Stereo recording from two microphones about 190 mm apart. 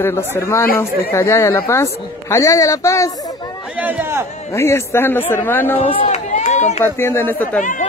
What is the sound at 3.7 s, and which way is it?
Speech, 10° right (ahead or behind).